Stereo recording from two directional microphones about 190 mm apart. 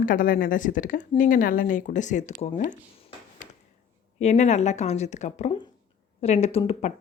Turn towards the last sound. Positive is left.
turn(degrees=35)  # may be behind; listen again after turning